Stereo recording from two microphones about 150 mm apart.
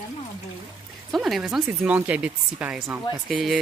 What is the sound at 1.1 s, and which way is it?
Speech, centre (ahead or behind).